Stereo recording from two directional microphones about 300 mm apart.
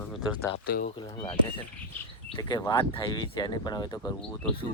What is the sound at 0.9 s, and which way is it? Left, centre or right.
Speech, centre.